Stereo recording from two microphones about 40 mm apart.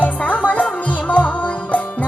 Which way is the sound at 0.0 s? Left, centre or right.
Left.